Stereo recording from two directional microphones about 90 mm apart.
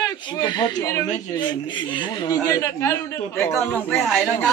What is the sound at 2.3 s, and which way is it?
Speech, 40° left (ahead or behind).